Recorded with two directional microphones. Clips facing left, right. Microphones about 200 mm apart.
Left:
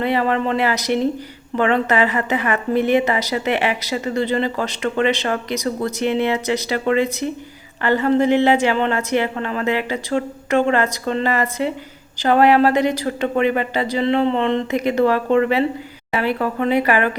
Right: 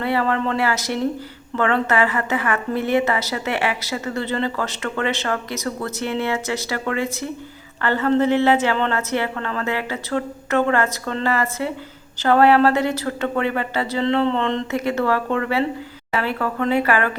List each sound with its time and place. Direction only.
0.0 s a woman's voice: 20° left (ahead or behind)